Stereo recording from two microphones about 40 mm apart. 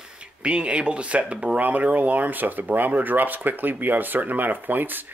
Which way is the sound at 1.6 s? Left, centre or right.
Right.